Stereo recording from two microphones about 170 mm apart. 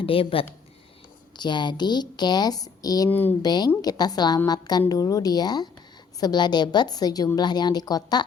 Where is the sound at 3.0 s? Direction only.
10° left (ahead or behind).